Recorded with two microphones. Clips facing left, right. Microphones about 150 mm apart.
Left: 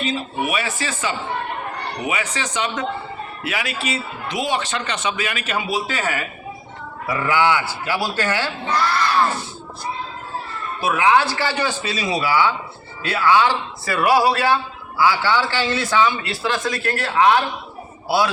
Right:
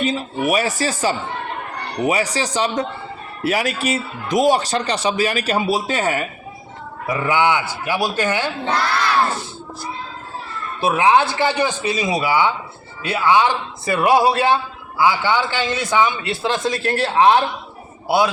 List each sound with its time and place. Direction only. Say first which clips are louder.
0.0 s a man's voice: right 3 dB; 45° right (ahead or behind)
6.0 s a man's voice: right 4 dB; 25° right (ahead or behind)
10.8 s a man's voice: right 2 dB; 25° right (ahead or behind)